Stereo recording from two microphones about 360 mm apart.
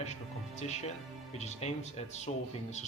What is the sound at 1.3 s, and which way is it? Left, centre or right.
Speech, centre.